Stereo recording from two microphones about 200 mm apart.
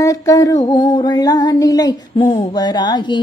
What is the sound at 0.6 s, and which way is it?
Mantra, 20° left (ahead or behind).